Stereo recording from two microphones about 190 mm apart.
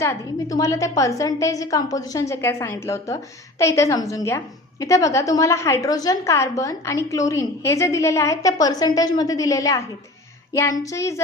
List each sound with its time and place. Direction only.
0.0 s a woman's voice: 15° left (ahead or behind)